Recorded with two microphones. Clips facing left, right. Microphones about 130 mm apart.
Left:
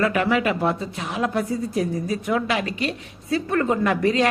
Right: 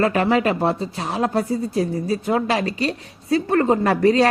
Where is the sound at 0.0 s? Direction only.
35° right (ahead or behind).